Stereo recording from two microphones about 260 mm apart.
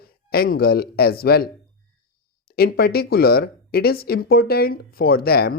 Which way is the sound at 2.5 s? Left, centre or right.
Left.